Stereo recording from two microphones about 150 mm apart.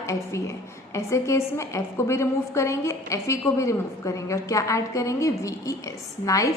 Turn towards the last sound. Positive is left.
turn(degrees=20)  # may be behind; listen again after turning